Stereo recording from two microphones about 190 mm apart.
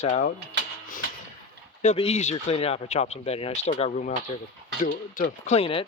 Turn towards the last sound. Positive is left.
turn(degrees=30)  # may be behind; listen again after turning